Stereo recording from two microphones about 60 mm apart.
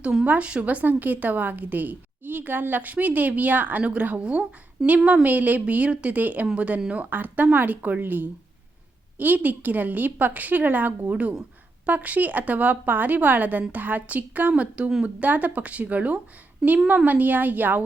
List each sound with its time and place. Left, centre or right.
0.0 s a woman's voice: centre; by 17.8 s right